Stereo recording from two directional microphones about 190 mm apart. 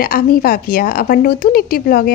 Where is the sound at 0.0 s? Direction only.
50° left (ahead or behind).